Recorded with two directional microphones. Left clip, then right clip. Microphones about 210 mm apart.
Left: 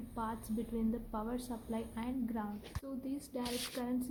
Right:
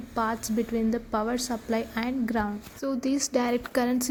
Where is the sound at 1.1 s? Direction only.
25° right (ahead or behind).